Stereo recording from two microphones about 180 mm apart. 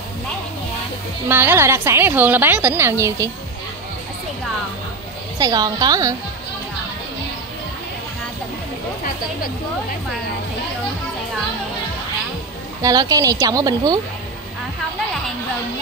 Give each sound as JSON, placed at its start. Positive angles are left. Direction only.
{"t": 1.3, "sound": "a woman's voice", "side_deg": -10}
{"t": 5.4, "sound": "a woman's voice", "side_deg": -20}
{"t": 12.8, "sound": "a woman's voice", "side_deg": -20}